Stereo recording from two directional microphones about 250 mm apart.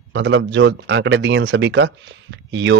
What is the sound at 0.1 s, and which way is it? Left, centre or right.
Speech, right.